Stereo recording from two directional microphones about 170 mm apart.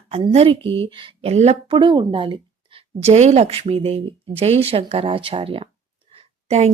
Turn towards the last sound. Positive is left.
turn(degrees=-40)  # may be behind; listen again after turning